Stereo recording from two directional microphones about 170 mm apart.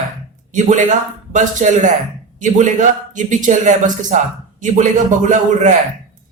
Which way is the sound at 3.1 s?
50° right (ahead or behind).